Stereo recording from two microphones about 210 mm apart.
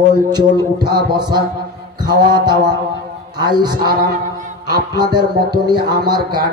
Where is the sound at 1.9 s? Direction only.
20° right (ahead or behind).